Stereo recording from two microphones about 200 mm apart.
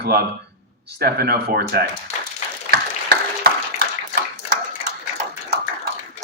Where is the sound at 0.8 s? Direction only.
55° right (ahead or behind).